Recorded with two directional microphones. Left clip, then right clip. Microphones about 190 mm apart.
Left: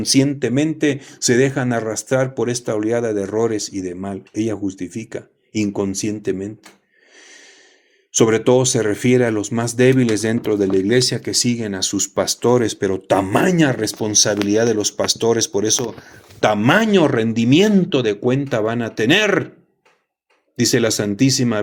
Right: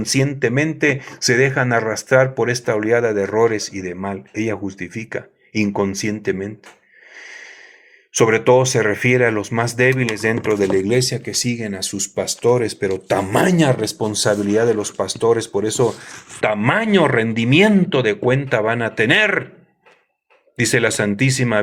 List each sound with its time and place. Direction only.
0.2 s speech: 30° left (ahead or behind)
8.2 s speech: 30° left (ahead or behind)
14.5 s speech: 40° left (ahead or behind)
14.8 s speech: 25° left (ahead or behind)
16.4 s speech: 35° left (ahead or behind)
20.6 s speech: 40° left (ahead or behind)